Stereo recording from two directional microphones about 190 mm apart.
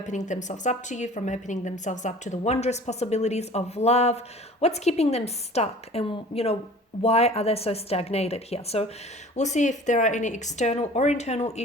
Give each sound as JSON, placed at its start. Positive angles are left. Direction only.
{"t": 0.0, "sound": "a woman's voice", "side_deg": 40}